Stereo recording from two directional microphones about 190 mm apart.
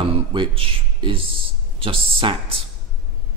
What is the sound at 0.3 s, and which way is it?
A man's voice, 25° right (ahead or behind).